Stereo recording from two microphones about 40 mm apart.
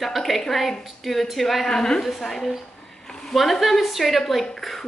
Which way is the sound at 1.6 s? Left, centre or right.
Centre.